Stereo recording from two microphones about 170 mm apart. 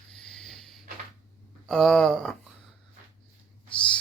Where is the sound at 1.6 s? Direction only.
Centre (ahead or behind).